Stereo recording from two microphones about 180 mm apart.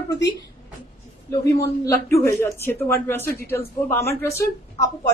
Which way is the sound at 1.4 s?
15° left (ahead or behind).